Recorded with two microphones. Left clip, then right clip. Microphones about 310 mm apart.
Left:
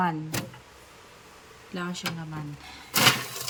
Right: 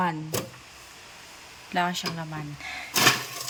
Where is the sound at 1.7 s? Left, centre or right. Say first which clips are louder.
Right 9 dB; centre.